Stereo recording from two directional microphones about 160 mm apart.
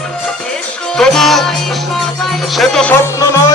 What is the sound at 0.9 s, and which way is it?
Music, 5° left (ahead or behind).